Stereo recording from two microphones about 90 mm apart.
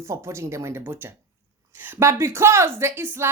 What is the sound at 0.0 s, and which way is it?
A woman's voice, 35° right (ahead or behind).